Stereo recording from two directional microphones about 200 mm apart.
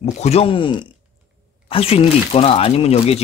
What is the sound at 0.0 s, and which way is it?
Speech, 30° left (ahead or behind).